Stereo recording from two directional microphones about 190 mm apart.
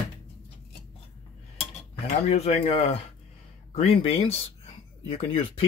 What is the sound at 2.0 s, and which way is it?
Speech, 35° left (ahead or behind).